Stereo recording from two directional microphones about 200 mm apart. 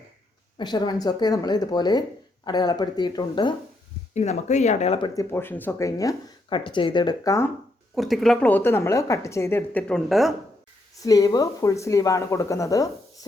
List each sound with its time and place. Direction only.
0.6 s speech: 20° left (ahead or behind)
4.1 s speech: 35° left (ahead or behind)
5.3 s a woman's voice: 10° left (ahead or behind)
7.9 s a woman's voice: centre (ahead or behind)
11.0 s a woman's voice: 15° left (ahead or behind)